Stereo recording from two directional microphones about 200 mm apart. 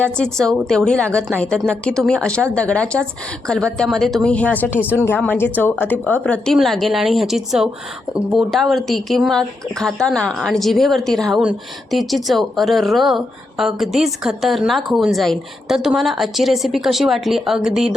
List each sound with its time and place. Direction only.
0.0 s a woman's voice: 5° left (ahead or behind)